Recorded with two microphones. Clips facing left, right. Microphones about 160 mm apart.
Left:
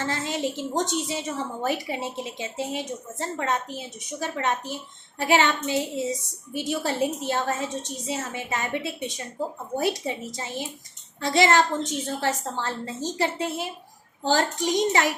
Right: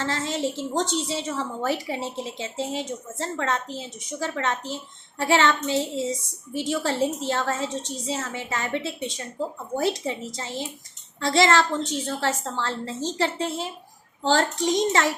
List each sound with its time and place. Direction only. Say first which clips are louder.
0.0 s a woman's voice: right 1 dB; 15° left (ahead or behind)